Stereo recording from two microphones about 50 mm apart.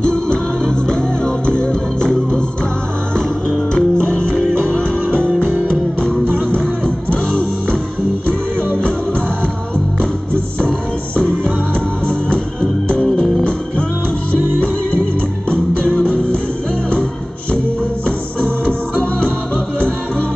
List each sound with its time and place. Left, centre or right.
0.0 s music: centre
3.7 s music: centre
12.8 s music: centre
15.5 s music: centre
19.1 s music: centre